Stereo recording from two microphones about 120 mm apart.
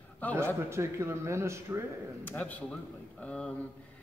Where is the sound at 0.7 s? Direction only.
25° right (ahead or behind).